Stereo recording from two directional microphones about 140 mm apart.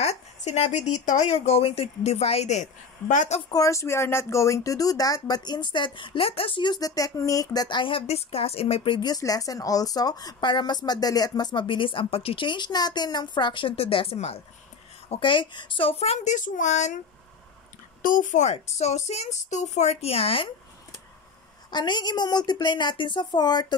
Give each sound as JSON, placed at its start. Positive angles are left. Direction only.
{"t": 0.0, "sound": "speech", "side_deg": 50}
{"t": 3.4, "sound": "speech", "side_deg": 25}
{"t": 15.0, "sound": "speech", "side_deg": 35}
{"t": 18.0, "sound": "speech", "side_deg": 70}
{"t": 21.6, "sound": "speech", "side_deg": 30}